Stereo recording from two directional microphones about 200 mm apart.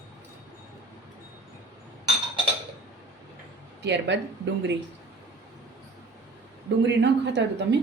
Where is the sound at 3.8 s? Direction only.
60° right (ahead or behind).